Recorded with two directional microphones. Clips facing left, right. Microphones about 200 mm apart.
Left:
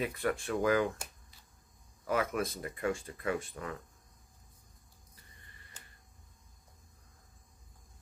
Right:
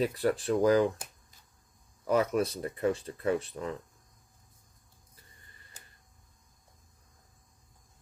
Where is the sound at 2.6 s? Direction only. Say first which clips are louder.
Right 5 dB; 35° right (ahead or behind).